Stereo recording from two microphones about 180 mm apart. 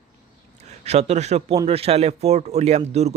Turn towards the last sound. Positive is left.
turn(degrees=-35)  # may be behind; listen again after turning